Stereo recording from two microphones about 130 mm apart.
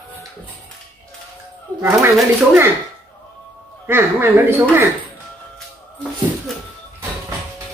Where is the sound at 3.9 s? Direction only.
15° right (ahead or behind).